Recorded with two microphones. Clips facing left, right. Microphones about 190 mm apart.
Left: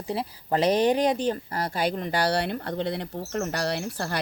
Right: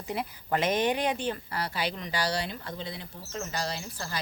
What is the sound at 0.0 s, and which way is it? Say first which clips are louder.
Speech: left 4 dB; 30° left (ahead or behind).